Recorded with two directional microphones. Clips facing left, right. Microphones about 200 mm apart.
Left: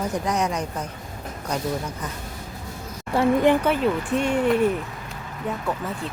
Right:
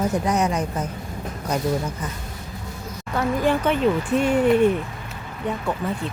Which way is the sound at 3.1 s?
25° left (ahead or behind).